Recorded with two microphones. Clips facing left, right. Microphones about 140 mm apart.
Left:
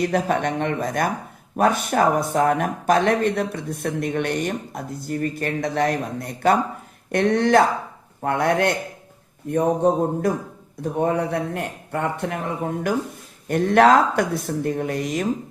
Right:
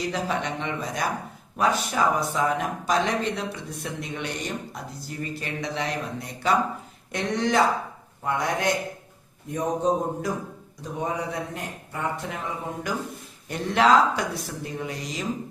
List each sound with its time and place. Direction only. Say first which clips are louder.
0.0 s a man's voice: left 6 dB; 55° left (ahead or behind)